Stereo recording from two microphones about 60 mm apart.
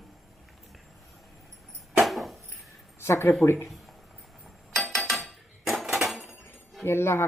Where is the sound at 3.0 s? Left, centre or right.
Left.